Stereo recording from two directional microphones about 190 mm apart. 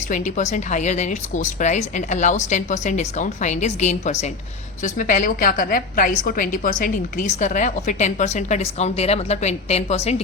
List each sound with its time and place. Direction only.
0.1 s a woman's voice: 40° left (ahead or behind)